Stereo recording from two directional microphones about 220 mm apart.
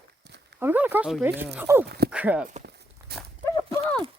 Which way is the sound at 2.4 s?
40° right (ahead or behind).